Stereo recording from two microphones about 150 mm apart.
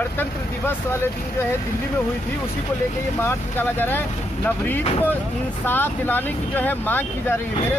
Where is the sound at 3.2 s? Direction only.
15° left (ahead or behind).